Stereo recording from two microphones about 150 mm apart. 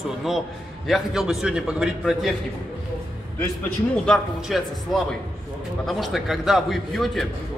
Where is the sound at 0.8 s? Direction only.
Centre (ahead or behind).